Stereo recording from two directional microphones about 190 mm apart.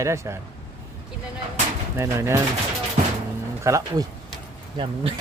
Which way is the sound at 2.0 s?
15° right (ahead or behind).